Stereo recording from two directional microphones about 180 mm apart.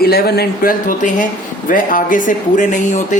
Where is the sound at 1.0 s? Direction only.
45° left (ahead or behind).